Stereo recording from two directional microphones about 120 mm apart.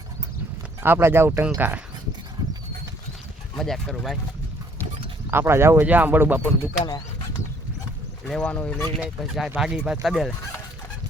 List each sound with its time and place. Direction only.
0.8 s speech: 20° right (ahead or behind)
3.5 s speech: 5° left (ahead or behind)
5.3 s speech: 20° right (ahead or behind)
8.3 s speech: 5° left (ahead or behind)
9.0 s speech: centre (ahead or behind)